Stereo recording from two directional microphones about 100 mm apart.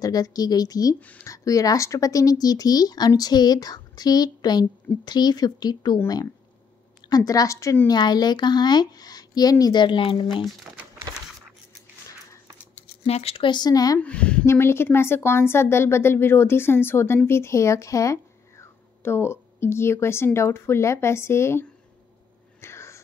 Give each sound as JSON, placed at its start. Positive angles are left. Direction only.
{"t": 0.0, "sound": "speech", "side_deg": 40}
{"t": 7.1, "sound": "speech", "side_deg": 40}
{"t": 7.9, "sound": "speech", "side_deg": 45}
{"t": 13.0, "sound": "speech", "side_deg": 90}
{"t": 13.5, "sound": "speech", "side_deg": 45}
{"t": 13.9, "sound": "a woman's voice", "side_deg": 10}
{"t": 14.4, "sound": "a woman's voice", "side_deg": 25}
{"t": 22.6, "sound": "a sound", "side_deg": 25}